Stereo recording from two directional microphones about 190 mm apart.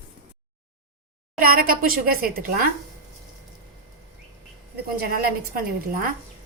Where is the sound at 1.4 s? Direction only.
50° right (ahead or behind).